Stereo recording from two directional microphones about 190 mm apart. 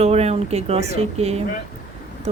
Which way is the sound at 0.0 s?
35° right (ahead or behind).